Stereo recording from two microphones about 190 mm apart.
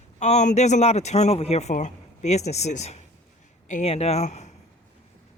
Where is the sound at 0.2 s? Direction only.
40° left (ahead or behind).